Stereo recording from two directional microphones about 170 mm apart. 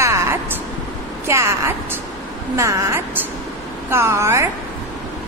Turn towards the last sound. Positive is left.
turn(degrees=-15)  # may be behind; listen again after turning